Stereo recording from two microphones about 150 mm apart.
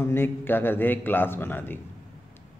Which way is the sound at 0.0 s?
15° left (ahead or behind).